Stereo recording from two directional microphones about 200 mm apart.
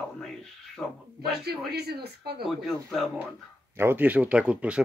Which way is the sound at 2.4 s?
Centre (ahead or behind).